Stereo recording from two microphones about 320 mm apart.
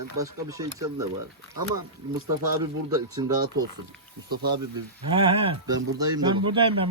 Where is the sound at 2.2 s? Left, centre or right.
Right.